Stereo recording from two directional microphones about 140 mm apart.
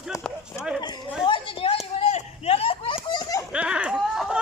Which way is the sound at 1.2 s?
35° left (ahead or behind).